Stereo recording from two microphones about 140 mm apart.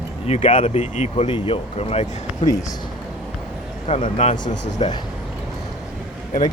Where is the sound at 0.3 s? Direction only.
55° left (ahead or behind).